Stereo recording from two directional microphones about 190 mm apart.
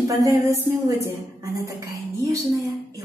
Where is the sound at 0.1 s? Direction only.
15° right (ahead or behind).